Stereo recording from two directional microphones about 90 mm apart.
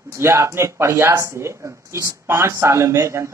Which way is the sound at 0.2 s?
30° right (ahead or behind).